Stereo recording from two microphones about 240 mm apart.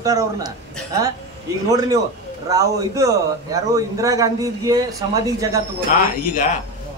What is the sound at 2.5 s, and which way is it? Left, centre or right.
A man's voice, centre.